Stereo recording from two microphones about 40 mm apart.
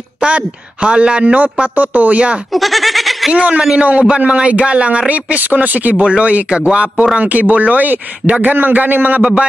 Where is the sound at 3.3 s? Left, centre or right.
Right.